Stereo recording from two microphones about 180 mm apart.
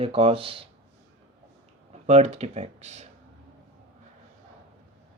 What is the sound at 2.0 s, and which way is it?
Speech, 40° right (ahead or behind).